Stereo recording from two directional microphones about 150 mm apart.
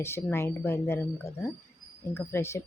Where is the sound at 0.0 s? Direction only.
15° left (ahead or behind).